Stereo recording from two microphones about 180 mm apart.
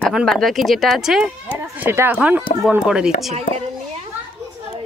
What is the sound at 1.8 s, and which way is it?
A woman's voice, 10° right (ahead or behind).